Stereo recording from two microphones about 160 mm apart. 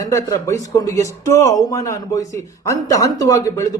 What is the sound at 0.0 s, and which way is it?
A man's voice, 20° left (ahead or behind).